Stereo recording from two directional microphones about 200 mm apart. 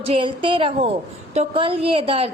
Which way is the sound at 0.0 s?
25° right (ahead or behind).